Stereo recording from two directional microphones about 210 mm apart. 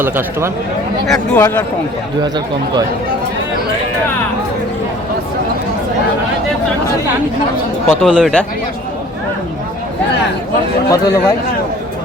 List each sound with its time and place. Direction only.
0.0 s speech: 10° right (ahead or behind)
1.0 s speech: 5° left (ahead or behind)
2.2 s speech: 20° right (ahead or behind)
7.9 s speech: 5° left (ahead or behind)
10.9 s speech: 15° left (ahead or behind)